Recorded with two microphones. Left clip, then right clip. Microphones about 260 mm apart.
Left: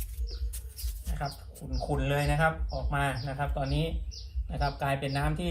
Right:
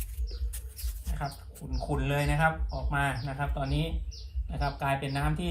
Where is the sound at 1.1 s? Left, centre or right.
Centre.